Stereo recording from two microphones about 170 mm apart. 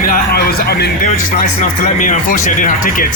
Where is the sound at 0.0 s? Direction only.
65° left (ahead or behind).